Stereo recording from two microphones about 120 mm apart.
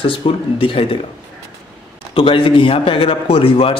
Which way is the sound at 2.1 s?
45° left (ahead or behind).